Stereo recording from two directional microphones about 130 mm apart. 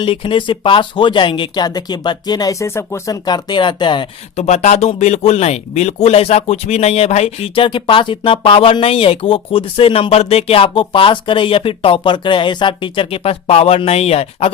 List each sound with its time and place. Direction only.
0.0 s speech: 45° left (ahead or behind); by 3.2 s 20° left (ahead or behind)
3.2 s speech: 35° left (ahead or behind)
4.4 s speech: 55° left (ahead or behind)